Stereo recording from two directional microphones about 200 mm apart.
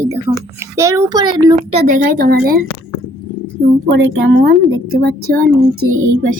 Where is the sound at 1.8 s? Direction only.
40° right (ahead or behind).